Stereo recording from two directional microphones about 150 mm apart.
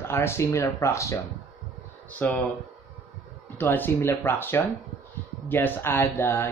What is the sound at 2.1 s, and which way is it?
Speech, 10° left (ahead or behind).